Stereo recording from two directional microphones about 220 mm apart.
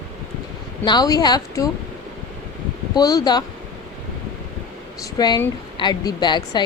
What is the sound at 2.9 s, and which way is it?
Speech, 15° left (ahead or behind).